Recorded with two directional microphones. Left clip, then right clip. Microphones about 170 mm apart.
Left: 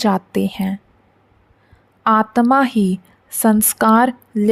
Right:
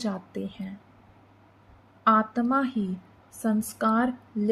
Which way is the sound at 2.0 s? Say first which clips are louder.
Left 8 dB; 70° left (ahead or behind).